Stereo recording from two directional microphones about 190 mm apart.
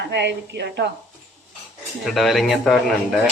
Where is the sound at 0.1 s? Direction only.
65° right (ahead or behind).